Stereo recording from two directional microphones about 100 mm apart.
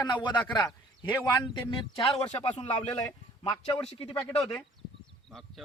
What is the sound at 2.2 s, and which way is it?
Speech, 80° left.